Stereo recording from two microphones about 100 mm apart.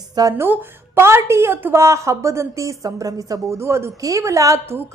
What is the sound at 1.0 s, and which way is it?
A woman's voice, 25° right (ahead or behind).